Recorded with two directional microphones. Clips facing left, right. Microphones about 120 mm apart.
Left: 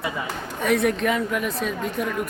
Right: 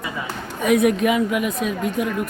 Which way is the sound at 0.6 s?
5° right (ahead or behind).